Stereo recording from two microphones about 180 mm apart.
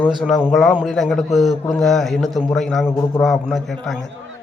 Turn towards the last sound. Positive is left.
turn(degrees=0)  # may be behind; listen again after turning